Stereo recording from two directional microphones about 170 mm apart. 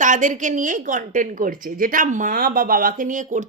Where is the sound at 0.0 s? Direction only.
50° right (ahead or behind).